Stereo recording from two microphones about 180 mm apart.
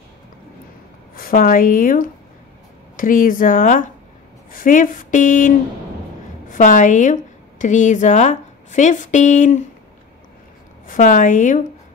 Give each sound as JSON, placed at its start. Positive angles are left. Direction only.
{"t": 1.1, "sound": "a woman's voice", "side_deg": 50}
{"t": 6.5, "sound": "a woman's voice", "side_deg": 45}
{"t": 10.9, "sound": "speech", "side_deg": 45}